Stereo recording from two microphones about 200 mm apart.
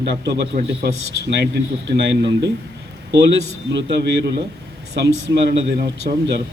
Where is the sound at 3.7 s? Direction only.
60° right (ahead or behind).